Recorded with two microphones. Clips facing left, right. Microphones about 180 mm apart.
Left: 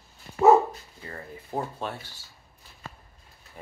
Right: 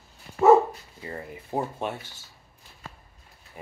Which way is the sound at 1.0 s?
20° right (ahead or behind).